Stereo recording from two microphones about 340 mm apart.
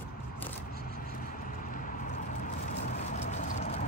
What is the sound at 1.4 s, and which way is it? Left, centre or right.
Vehicle, left.